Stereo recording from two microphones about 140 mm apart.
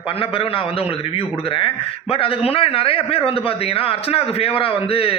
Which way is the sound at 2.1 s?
40° left (ahead or behind).